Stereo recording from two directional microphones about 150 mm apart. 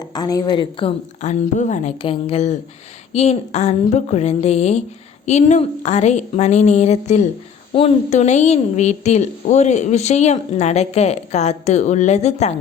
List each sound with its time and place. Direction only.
0.1 s a woman's voice: 25° left (ahead or behind)
1.2 s a woman's voice: 50° left (ahead or behind)
2.0 s a woman's voice: 35° left (ahead or behind)